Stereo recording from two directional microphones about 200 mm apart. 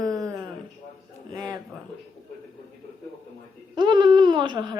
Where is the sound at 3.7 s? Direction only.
20° right (ahead or behind).